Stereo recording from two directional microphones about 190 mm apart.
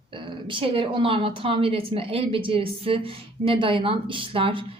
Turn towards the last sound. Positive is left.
turn(degrees=-30)  # may be behind; listen again after turning